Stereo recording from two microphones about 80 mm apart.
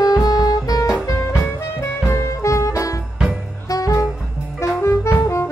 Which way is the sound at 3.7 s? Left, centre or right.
Left.